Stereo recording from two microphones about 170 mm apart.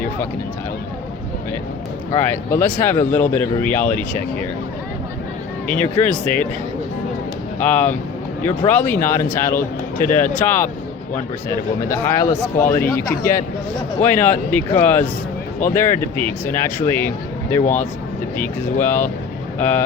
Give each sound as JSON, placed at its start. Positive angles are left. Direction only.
{"t": 2.1, "sound": "speech", "side_deg": 15}
{"t": 5.6, "sound": "speech", "side_deg": 10}
{"t": 7.6, "sound": "speech", "side_deg": 10}
{"t": 12.0, "sound": "speech", "side_deg": 15}
{"t": 17.6, "sound": "speech", "side_deg": 50}
{"t": 18.3, "sound": "speech", "side_deg": 10}